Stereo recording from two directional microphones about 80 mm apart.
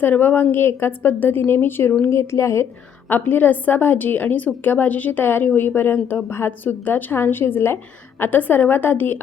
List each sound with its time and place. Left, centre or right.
0.0 s a woman's voice: left
3.1 s a woman's voice: left